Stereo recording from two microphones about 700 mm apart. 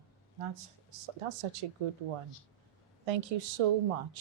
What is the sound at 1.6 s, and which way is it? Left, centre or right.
Speech, right.